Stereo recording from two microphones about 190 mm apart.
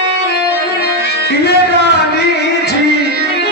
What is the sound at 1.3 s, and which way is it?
Music, 60° left (ahead or behind).